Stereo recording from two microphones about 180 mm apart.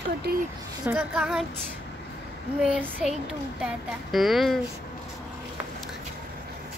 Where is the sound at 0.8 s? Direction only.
5° right (ahead or behind).